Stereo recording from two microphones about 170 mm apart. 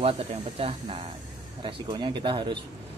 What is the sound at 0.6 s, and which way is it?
Speech, 35° right (ahead or behind).